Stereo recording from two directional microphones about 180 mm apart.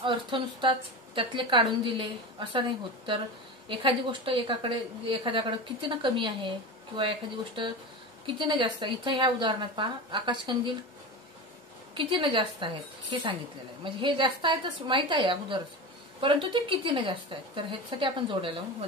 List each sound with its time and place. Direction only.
0.0 s a woman's voice: 30° right (ahead or behind)
3.6 s a woman's voice: 30° right (ahead or behind)
11.9 s a woman's voice: 30° right (ahead or behind)
13.8 s a woman's voice: 25° right (ahead or behind)